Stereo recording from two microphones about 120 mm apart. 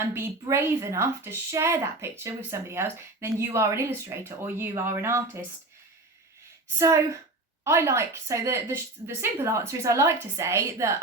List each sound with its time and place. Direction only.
0.1 s a woman's voice: 20° right (ahead or behind)
6.7 s a woman's voice: 25° right (ahead or behind)